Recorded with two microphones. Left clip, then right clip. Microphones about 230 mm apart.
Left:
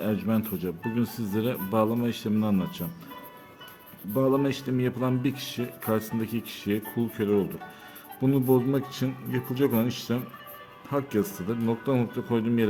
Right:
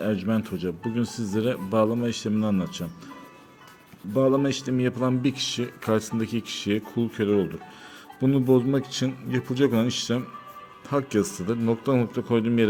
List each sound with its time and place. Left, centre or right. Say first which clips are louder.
0.0 s speech: right 2 dB; centre
4.1 s speech: right 3 dB; centre